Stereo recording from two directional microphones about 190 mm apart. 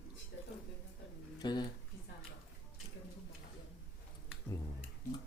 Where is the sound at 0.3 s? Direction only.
85° left.